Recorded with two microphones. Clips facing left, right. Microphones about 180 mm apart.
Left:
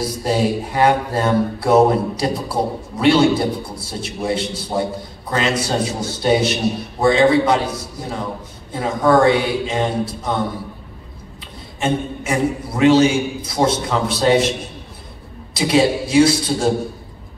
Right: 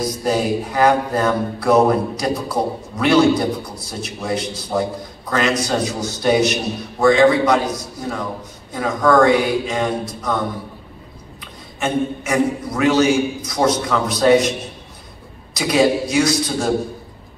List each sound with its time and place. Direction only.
0.2 s speech: 25° left (ahead or behind)
11.8 s speech: 30° left (ahead or behind)
15.5 s speech: 30° left (ahead or behind)